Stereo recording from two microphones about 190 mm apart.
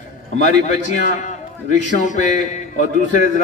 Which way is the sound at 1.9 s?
40° left (ahead or behind).